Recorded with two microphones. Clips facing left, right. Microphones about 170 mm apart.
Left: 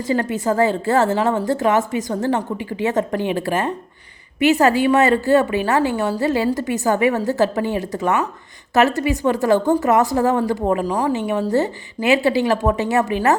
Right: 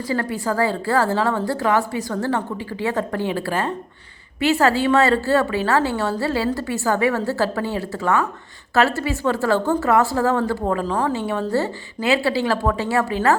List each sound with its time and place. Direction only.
0.1 s a woman's voice: 20° left (ahead or behind)